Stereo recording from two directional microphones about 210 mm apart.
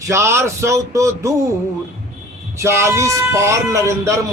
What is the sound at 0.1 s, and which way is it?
A man's voice, 10° right (ahead or behind).